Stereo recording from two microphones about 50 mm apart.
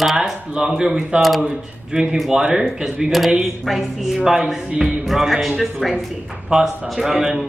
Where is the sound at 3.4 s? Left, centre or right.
Centre.